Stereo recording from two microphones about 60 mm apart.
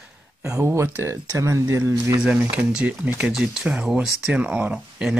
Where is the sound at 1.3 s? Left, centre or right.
Right.